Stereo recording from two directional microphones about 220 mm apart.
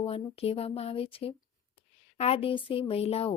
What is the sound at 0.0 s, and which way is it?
Speech, 25° left (ahead or behind).